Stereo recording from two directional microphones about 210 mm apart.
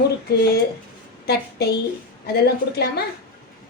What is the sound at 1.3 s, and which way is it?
A woman's voice, 50° left (ahead or behind).